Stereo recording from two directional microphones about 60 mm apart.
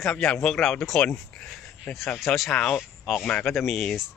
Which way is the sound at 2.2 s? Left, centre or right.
Centre.